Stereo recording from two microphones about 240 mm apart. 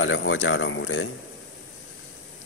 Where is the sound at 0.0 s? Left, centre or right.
Left.